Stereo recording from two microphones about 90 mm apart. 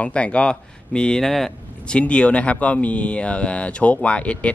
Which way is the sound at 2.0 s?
15° left (ahead or behind).